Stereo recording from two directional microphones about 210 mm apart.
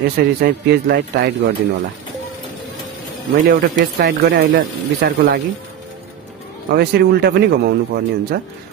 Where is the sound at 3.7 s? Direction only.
50° right (ahead or behind).